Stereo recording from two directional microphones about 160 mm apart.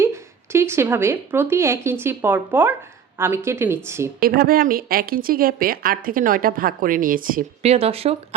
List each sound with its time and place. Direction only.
0.0 s speech: 15° right (ahead or behind)
4.2 s a woman's voice: 65° right (ahead or behind)
7.6 s speech: 40° right (ahead or behind)